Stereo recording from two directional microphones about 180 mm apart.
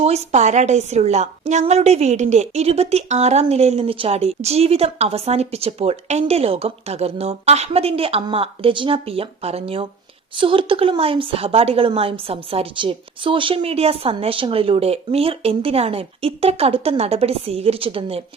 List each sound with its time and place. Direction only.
0.0 s a woman's voice: 35° right (ahead or behind)